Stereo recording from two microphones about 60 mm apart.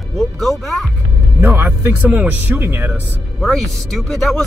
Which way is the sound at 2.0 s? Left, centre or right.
Right.